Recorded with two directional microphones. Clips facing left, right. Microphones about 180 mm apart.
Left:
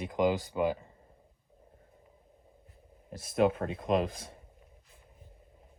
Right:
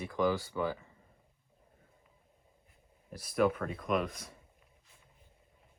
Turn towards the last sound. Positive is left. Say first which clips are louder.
# left 4 dB
turn(degrees=30)  # may be behind; listen again after turning